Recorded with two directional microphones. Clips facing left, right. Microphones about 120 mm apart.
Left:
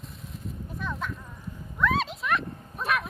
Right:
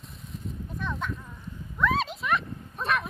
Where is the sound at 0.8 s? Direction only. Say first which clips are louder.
Right 1 dB; centre (ahead or behind).